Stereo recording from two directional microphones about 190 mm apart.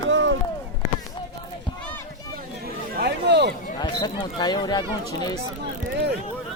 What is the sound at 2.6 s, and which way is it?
Chatter, 55° right (ahead or behind).